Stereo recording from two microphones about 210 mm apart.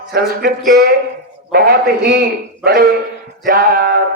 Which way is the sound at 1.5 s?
45° right (ahead or behind).